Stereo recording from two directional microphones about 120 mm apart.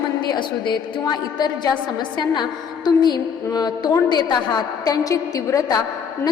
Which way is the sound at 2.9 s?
35° left (ahead or behind).